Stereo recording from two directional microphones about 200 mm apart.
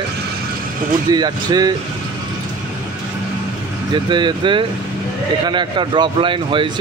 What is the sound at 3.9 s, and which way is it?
Speech, 20° right (ahead or behind).